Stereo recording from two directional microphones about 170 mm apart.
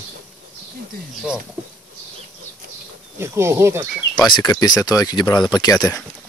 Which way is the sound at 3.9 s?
5° left (ahead or behind).